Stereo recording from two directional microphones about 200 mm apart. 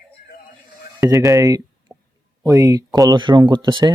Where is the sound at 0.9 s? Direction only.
15° right (ahead or behind).